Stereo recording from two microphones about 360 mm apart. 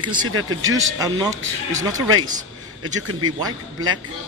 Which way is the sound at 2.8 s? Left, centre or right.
Right.